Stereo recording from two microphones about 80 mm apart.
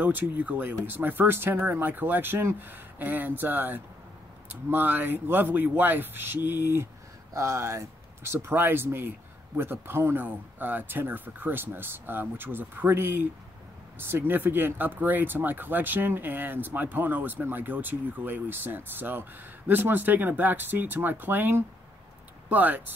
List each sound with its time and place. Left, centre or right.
0.0 s speech: right